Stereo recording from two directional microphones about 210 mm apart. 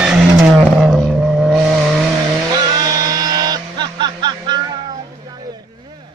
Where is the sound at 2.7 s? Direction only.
15° right (ahead or behind).